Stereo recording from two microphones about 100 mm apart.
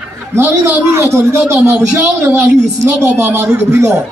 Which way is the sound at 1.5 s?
25° right (ahead or behind).